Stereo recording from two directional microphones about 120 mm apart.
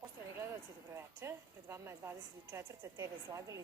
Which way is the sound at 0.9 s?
20° right (ahead or behind).